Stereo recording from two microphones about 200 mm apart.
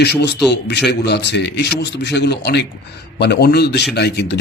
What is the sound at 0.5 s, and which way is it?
Speech, 55° left (ahead or behind).